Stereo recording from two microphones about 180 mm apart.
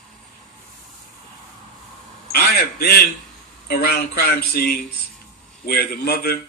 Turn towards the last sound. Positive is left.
turn(degrees=60)  # may be behind; listen again after turning